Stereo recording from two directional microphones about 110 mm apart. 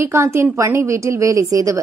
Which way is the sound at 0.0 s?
25° right (ahead or behind).